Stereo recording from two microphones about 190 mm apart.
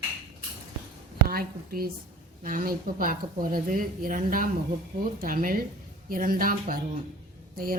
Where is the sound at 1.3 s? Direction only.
50° right (ahead or behind).